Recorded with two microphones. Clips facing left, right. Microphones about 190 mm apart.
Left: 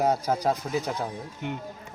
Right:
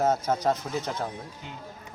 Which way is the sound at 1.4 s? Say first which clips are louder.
Left 10 dB; 65° left (ahead or behind).